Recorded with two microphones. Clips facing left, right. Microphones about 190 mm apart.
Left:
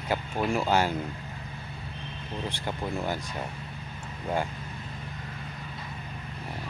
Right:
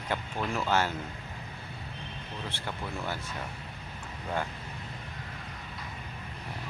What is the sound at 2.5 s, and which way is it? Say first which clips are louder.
Speech: left 5 dB; 15° left (ahead or behind).